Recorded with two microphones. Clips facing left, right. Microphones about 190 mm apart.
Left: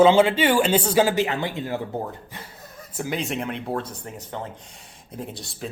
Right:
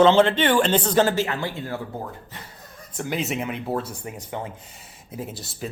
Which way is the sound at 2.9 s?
Centre (ahead or behind).